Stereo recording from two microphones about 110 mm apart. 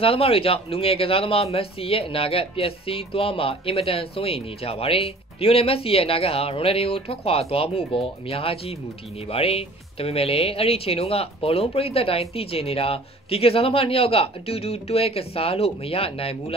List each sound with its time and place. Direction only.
0.0 s a man's voice: 55° left (ahead or behind)